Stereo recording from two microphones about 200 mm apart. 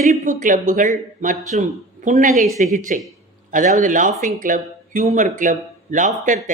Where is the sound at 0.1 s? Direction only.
40° right (ahead or behind).